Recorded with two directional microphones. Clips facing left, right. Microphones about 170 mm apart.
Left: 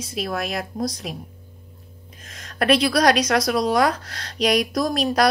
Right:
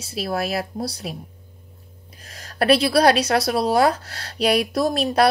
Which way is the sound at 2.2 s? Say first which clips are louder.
Right 2 dB; 35° right (ahead or behind).